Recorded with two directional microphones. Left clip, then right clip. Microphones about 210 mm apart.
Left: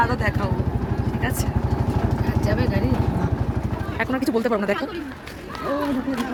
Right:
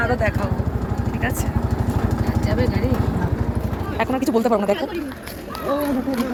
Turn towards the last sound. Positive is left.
turn(degrees=15)  # may be behind; listen again after turning